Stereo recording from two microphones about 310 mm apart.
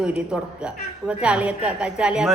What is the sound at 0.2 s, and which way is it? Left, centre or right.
A woman's voice, centre.